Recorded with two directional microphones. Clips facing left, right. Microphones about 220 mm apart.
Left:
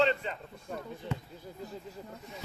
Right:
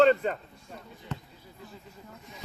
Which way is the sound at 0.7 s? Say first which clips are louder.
Left 7 dB; 55° left (ahead or behind).